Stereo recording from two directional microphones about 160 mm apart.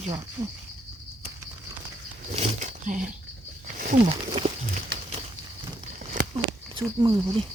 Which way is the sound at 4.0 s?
40° right (ahead or behind).